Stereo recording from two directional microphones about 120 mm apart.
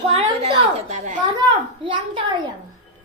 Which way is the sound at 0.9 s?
90° right.